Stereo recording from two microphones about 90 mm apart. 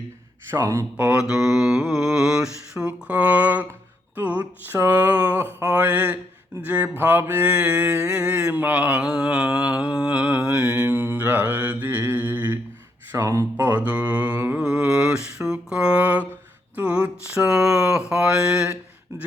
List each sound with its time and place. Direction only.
0.5 s speech: 35° right (ahead or behind)
0.9 s mantra: 15° right (ahead or behind)
1.2 s mantra: 5° right (ahead or behind)
10.9 s mantra: 25° right (ahead or behind)
13.1 s speech: 35° right (ahead or behind)
13.6 s mantra: 20° right (ahead or behind)
14.6 s mantra: 10° right (ahead or behind)